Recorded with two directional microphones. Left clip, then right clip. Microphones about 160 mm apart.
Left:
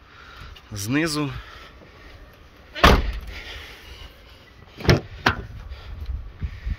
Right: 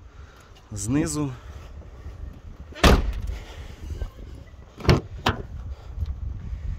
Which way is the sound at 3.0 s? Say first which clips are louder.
Left 6 dB; 30° right (ahead or behind).